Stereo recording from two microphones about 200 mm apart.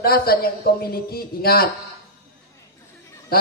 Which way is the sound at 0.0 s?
50° left (ahead or behind).